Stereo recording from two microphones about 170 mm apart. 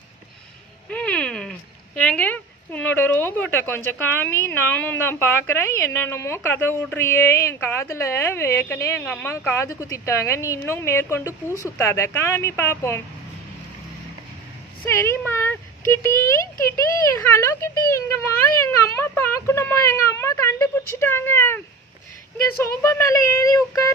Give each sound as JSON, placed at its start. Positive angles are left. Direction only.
{"t": 0.8, "sound": "a sound", "side_deg": 5}
{"t": 2.0, "sound": "speech", "side_deg": 5}
{"t": 14.9, "sound": "speech", "side_deg": 15}
{"t": 22.6, "sound": "speech", "side_deg": 15}